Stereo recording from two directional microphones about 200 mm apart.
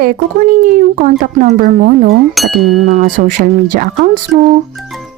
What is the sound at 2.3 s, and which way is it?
Speech, centre (ahead or behind).